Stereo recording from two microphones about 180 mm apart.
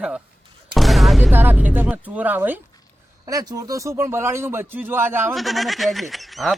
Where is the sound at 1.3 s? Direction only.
10° right (ahead or behind).